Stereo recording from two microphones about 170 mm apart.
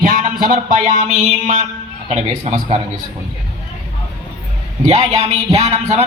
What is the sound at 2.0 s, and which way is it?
Speech, 40° right (ahead or behind).